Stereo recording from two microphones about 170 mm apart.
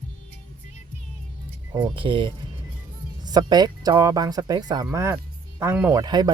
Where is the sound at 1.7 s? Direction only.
30° right (ahead or behind).